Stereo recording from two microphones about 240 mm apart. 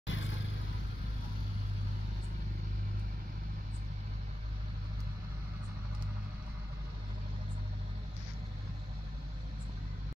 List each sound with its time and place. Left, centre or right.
0.0 s vehicle: left